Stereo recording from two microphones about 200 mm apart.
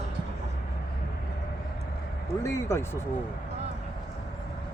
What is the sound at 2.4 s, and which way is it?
Speech, 15° left (ahead or behind).